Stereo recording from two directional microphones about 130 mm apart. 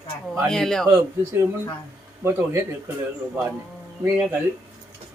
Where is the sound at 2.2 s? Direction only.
20° right (ahead or behind).